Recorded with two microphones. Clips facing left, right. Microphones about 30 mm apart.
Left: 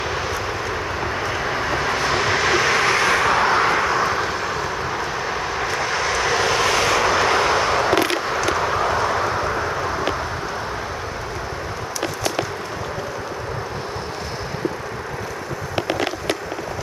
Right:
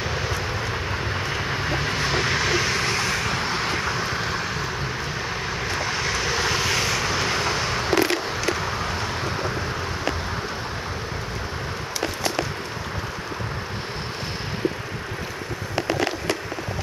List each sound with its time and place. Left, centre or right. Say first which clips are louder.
1.0 s vehicle: left 3 dB; centre
2.7 s vehicle: left 6 dB; left
4.1 s vehicle: left 4 dB; centre
6.8 s vehicle: left 6 dB; left